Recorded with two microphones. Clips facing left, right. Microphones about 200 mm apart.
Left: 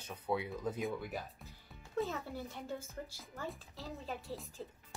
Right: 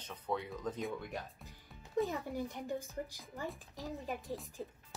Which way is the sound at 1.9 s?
15° right (ahead or behind).